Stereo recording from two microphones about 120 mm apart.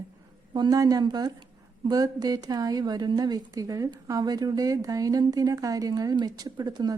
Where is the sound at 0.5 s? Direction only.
35° right (ahead or behind).